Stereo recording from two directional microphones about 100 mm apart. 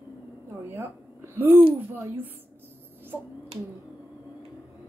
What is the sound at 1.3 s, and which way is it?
Speech, 20° right (ahead or behind).